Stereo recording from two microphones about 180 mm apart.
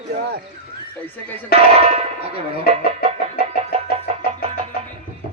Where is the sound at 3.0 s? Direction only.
35° right (ahead or behind).